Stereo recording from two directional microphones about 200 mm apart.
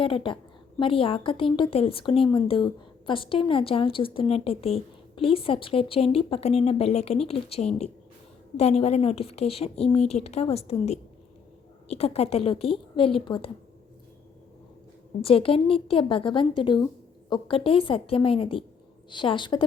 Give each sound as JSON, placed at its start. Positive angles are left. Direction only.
{"t": 0.0, "sound": "a woman's voice", "side_deg": 25}
{"t": 15.2, "sound": "a woman's voice", "side_deg": 30}